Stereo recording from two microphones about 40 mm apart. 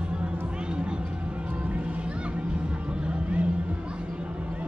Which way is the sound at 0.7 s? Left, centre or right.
Right.